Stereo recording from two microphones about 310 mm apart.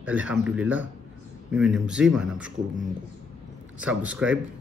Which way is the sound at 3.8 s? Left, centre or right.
Centre.